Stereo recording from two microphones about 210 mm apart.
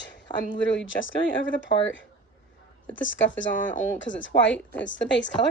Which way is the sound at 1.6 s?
65° left (ahead or behind).